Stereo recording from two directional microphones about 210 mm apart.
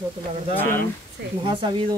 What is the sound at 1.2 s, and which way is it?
Speech, 50° right (ahead or behind).